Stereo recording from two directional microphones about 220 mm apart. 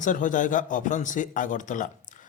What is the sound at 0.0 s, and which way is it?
Speech, 35° left (ahead or behind).